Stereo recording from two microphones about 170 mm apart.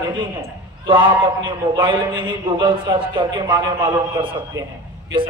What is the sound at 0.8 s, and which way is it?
A man's voice, 30° right (ahead or behind).